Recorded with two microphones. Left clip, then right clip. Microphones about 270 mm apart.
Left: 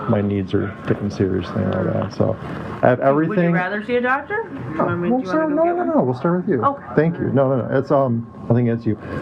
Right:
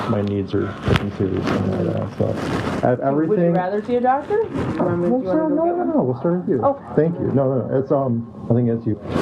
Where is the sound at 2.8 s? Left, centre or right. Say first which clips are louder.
Left 4 dB; left.